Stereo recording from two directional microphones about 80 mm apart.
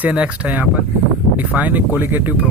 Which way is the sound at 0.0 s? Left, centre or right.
Centre.